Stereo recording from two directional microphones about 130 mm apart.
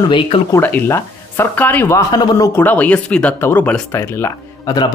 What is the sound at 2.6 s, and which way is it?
Speech, 10° left (ahead or behind).